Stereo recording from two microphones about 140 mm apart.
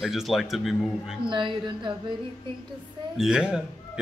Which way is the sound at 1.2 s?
35° right (ahead or behind).